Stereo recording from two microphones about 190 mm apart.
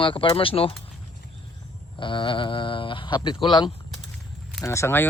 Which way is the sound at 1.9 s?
25° left (ahead or behind).